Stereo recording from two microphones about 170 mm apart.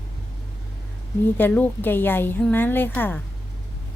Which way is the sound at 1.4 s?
10° left (ahead or behind).